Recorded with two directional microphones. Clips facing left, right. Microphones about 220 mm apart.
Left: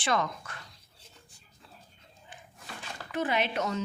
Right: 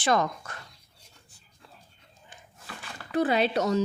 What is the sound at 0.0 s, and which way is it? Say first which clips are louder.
Speech: right 4 dB; 45° right (ahead or behind).